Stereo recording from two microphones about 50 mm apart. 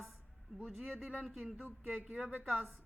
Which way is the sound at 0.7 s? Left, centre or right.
Centre.